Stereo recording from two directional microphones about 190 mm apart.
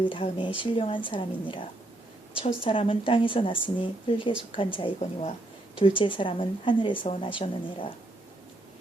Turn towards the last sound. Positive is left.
turn(degrees=25)  # may be behind; listen again after turning